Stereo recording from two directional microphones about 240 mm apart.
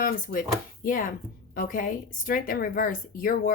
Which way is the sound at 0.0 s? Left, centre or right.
Left.